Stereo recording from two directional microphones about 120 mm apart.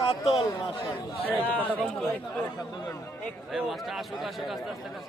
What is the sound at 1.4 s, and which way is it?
Speech, 15° left (ahead or behind).